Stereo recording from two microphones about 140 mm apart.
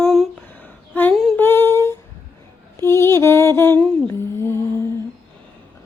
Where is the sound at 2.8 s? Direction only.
20° left (ahead or behind).